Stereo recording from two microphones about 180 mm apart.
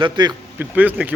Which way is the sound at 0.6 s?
10° right (ahead or behind).